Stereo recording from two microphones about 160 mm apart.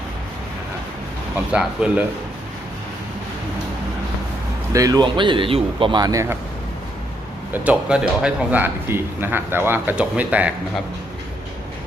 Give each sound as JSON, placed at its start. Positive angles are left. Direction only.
{"t": 1.5, "sound": "a man's voice", "side_deg": -10}
{"t": 4.7, "sound": "speech", "side_deg": -20}
{"t": 7.5, "sound": "a man's voice", "side_deg": -10}